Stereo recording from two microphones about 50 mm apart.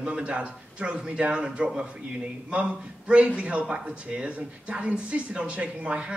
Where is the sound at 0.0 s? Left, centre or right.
Right.